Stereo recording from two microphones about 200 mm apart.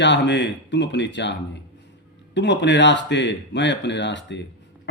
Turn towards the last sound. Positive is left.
turn(degrees=60)  # may be behind; listen again after turning